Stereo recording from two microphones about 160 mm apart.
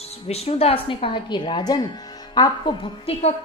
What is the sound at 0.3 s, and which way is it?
A woman's voice, 40° left (ahead or behind).